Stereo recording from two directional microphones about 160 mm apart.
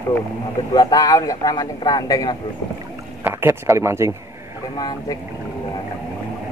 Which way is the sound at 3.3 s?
15° right (ahead or behind).